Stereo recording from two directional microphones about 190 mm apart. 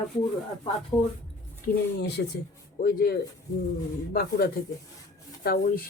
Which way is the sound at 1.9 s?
60° left (ahead or behind).